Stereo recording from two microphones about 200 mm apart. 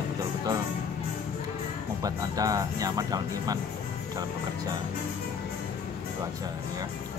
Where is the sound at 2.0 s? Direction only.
15° right (ahead or behind).